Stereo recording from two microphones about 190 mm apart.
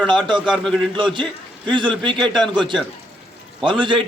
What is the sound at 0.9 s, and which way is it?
Speech, 25° right (ahead or behind).